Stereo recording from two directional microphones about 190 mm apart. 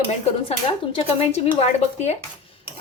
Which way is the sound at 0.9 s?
35° left (ahead or behind).